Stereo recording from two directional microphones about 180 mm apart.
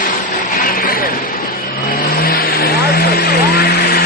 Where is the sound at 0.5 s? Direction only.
50° left (ahead or behind).